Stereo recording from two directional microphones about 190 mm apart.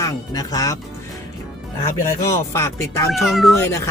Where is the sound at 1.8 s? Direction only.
15° left (ahead or behind).